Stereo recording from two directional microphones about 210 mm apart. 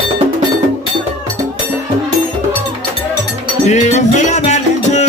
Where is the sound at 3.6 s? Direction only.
35° left (ahead or behind).